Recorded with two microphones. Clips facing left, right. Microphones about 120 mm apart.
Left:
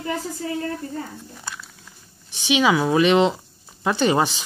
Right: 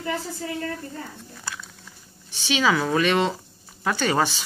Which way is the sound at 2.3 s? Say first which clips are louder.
Left 3 dB; 15° left (ahead or behind).